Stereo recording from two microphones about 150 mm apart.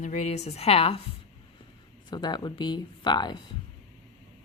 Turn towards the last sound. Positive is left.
turn(degrees=30)  # may be behind; listen again after turning